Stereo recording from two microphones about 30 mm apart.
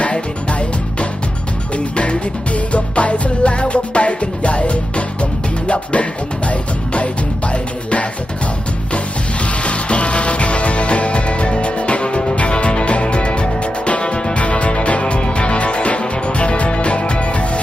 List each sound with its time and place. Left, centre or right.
1.7 s music: left
9.4 s music: left